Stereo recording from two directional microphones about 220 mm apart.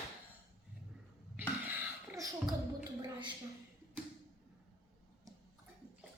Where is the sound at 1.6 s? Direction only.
10° right (ahead or behind).